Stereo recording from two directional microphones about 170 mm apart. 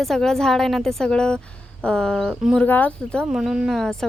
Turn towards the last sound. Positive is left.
turn(degrees=5)  # may be behind; listen again after turning